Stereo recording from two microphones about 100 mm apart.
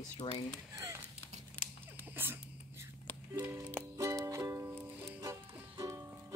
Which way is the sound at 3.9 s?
30° right (ahead or behind).